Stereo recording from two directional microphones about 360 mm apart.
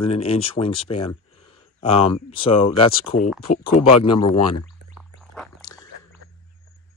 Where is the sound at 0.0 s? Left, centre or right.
Centre.